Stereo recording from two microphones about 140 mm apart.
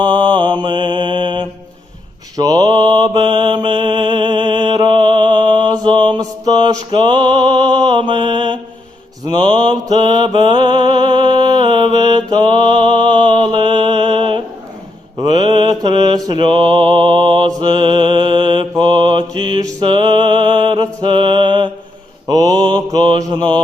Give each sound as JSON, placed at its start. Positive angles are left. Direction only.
{"t": 0.0, "sound": "mantra", "side_deg": -35}